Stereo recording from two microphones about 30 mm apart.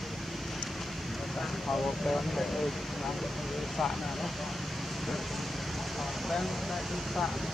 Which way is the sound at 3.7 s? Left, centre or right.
Centre.